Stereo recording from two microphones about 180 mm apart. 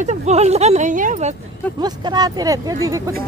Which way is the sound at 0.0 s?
35° right (ahead or behind).